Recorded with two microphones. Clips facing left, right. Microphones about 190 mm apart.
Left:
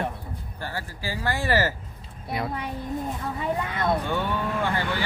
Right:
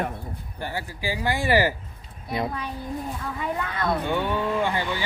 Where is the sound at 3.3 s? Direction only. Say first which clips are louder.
Left 1 dB; 25° left (ahead or behind).